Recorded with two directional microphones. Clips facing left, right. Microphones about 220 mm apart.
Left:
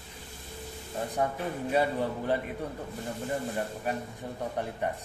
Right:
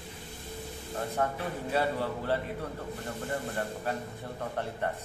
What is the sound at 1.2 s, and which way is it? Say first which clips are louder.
A man's voice: left 2 dB; 15° left (ahead or behind).